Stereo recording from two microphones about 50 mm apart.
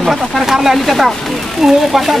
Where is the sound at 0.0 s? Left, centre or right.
Centre.